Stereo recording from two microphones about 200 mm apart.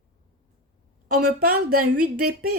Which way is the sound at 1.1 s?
45° right (ahead or behind).